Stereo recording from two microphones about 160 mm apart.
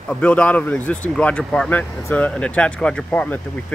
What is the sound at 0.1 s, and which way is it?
Speech, 10° left (ahead or behind).